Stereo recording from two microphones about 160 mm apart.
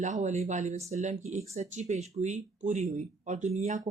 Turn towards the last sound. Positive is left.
turn(degrees=-50)  # may be behind; listen again after turning